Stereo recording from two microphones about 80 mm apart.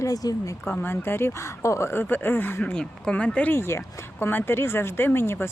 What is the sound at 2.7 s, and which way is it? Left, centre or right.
Speech, centre.